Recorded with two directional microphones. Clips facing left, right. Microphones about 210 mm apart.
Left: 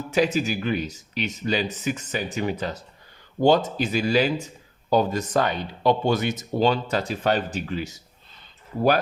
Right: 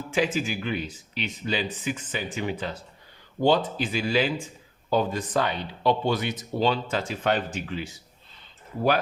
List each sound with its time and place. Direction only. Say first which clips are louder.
0.1 s speech: left 4 dB; 40° left (ahead or behind)